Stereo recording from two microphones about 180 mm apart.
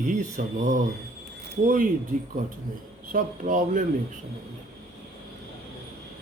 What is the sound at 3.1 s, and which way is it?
Speech, 45° right (ahead or behind).